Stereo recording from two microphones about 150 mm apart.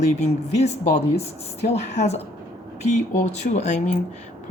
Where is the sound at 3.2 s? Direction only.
50° left (ahead or behind).